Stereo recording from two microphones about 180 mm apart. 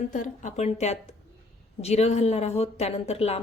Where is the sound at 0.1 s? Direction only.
45° left (ahead or behind).